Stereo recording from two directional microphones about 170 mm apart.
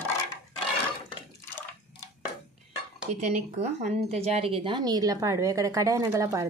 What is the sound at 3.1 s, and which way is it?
Speech, 40° right (ahead or behind).